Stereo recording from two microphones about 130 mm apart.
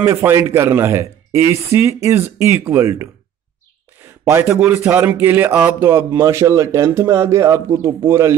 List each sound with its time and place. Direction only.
0.0 s speech: 20° right (ahead or behind)